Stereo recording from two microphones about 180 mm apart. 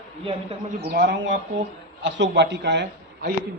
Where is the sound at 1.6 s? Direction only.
80° right.